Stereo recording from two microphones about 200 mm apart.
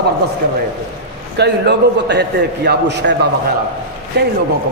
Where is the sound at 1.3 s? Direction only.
55° right (ahead or behind).